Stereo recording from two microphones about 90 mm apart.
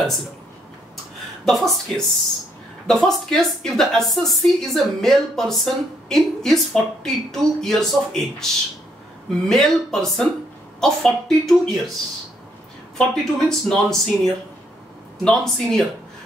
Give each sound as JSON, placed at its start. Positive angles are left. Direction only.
{"t": 1.4, "sound": "a woman's voice", "side_deg": 5}
{"t": 9.5, "sound": "a woman's voice", "side_deg": 5}
{"t": 12.9, "sound": "a woman's voice", "side_deg": 5}